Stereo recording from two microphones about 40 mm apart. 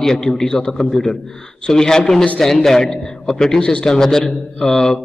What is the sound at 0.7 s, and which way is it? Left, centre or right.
A man's voice, centre.